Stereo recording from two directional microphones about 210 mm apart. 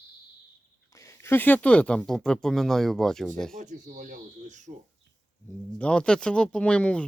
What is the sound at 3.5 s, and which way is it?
Speech, 35° right (ahead or behind).